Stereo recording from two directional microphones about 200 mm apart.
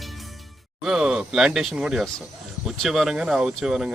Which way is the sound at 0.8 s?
5° right (ahead or behind).